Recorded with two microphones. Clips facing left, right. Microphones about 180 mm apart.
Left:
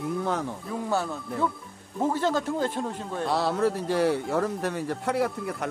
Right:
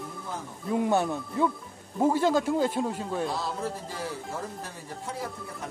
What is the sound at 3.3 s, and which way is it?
Speech, 70° left (ahead or behind).